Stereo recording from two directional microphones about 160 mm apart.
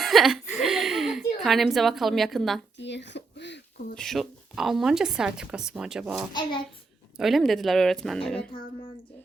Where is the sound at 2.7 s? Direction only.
90° left.